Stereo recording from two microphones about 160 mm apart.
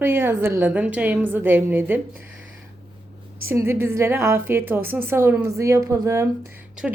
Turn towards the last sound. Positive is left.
turn(degrees=-5)  # may be behind; listen again after turning